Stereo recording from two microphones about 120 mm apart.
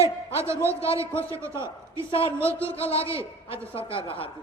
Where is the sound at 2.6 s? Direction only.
50° left (ahead or behind).